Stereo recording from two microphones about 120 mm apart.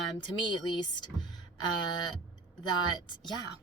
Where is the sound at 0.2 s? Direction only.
40° left (ahead or behind).